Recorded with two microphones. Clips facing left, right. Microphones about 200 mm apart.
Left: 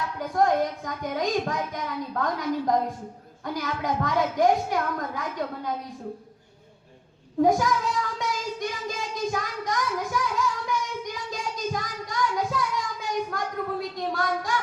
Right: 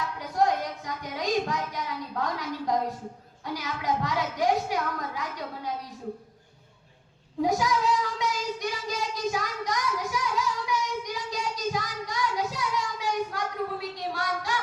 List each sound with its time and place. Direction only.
0.2 s a child's voice: 50° left (ahead or behind)
7.4 s a child's voice: 50° left (ahead or behind)
8.2 s child singing: 50° left (ahead or behind)